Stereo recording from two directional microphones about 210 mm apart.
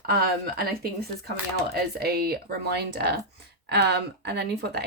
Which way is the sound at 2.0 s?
50° right (ahead or behind).